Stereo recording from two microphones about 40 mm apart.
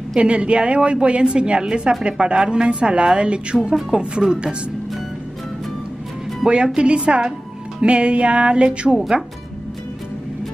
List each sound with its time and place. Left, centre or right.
0.2 s a woman's voice: right
6.4 s a woman's voice: right